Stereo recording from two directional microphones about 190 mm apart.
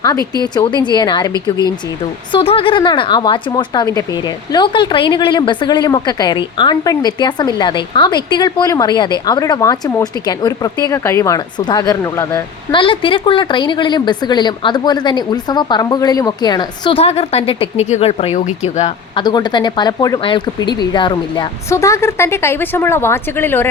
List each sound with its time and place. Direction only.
0.0 s a woman's voice: 20° left (ahead or behind)
12.8 s a woman's voice: 25° left (ahead or behind)